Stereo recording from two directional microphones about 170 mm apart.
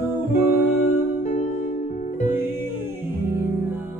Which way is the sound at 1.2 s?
40° left (ahead or behind).